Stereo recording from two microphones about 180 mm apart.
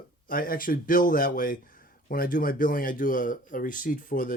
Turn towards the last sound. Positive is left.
turn(degrees=50)  # may be behind; listen again after turning